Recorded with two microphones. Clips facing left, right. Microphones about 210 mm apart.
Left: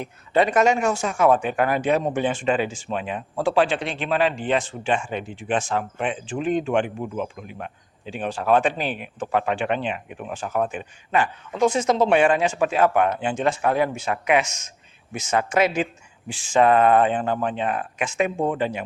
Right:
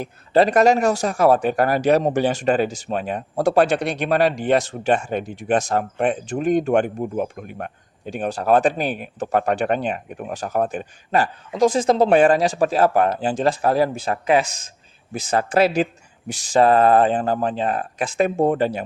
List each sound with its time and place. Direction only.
0.0 s speech: 35° right (ahead or behind)